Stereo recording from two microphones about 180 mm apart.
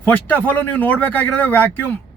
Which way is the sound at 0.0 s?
10° left (ahead or behind).